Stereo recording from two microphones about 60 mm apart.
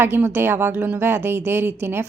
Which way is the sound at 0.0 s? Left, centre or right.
Right.